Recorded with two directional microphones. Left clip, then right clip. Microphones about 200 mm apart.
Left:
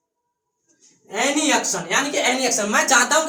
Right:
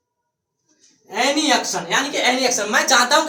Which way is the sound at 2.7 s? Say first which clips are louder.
Right 1 dB; 30° right (ahead or behind).